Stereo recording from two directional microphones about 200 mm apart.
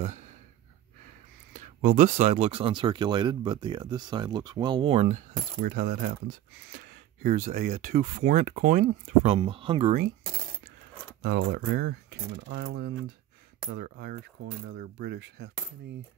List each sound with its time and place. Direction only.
1.5 s speech: 40° right (ahead or behind)
11.2 s speech: 55° right (ahead or behind)